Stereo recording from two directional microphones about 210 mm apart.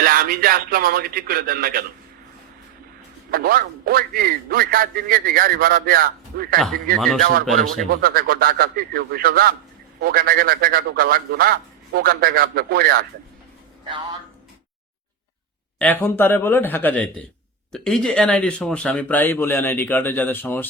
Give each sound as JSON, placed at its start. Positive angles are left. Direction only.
{"t": 0.0, "sound": "a man's voice", "side_deg": -45}
{"t": 3.3, "sound": "a man's voice", "side_deg": -45}
{"t": 7.9, "sound": "a man's voice", "side_deg": -45}
{"t": 13.8, "sound": "a man's voice", "side_deg": -25}
{"t": 15.8, "sound": "speech", "side_deg": 10}